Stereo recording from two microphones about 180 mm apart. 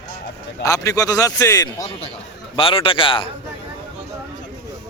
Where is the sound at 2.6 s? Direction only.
30° left (ahead or behind).